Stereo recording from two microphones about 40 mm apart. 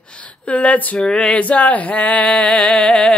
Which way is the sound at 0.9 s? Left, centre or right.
Centre.